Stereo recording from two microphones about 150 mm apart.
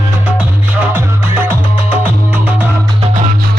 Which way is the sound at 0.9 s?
15° right (ahead or behind).